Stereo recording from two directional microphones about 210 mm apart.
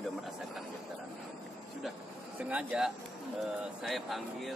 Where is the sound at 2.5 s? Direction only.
5° right (ahead or behind).